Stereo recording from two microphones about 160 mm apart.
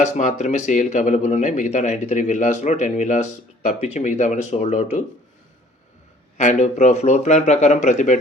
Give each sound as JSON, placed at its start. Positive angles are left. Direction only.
{"t": 0.0, "sound": "speech", "side_deg": 50}
{"t": 6.3, "sound": "speech", "side_deg": 45}